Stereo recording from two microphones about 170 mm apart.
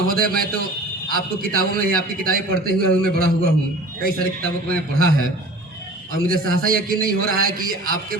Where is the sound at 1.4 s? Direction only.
60° right (ahead or behind).